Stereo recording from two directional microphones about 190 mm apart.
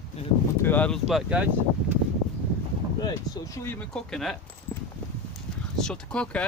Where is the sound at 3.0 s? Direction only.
15° left (ahead or behind).